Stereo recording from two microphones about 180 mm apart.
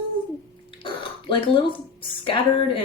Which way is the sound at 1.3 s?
30° left (ahead or behind).